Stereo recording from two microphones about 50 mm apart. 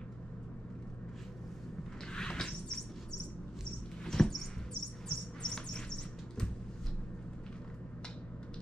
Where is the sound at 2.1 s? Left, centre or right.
Centre.